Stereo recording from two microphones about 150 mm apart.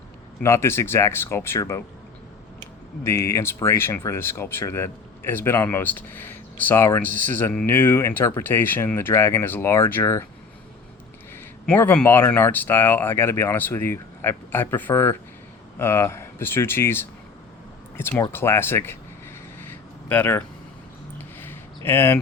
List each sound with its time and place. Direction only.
0.4 s speech: 15° left (ahead or behind)
3.0 s speech: 15° left (ahead or behind)
11.3 s speech: 15° left (ahead or behind)
19.5 s a sound: 10° left (ahead or behind)